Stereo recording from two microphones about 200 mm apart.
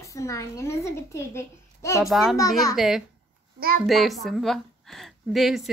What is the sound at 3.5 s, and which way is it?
Speech, 45° right (ahead or behind).